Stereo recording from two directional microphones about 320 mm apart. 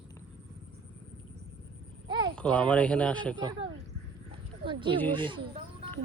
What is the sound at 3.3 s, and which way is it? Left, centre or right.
Speech, centre.